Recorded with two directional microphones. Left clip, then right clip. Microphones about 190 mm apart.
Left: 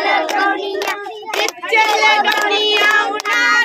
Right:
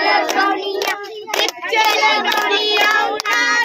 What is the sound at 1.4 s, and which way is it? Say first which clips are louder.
Child singing: left 1 dB; 30° left (ahead or behind).